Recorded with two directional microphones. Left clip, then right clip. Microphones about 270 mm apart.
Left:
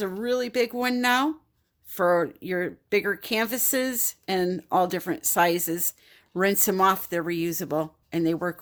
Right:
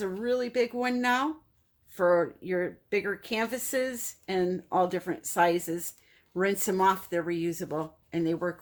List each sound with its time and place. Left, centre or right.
0.0 s speech: left